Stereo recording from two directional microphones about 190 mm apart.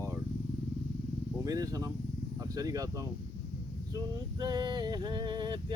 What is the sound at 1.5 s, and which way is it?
Male singing, 20° right (ahead or behind).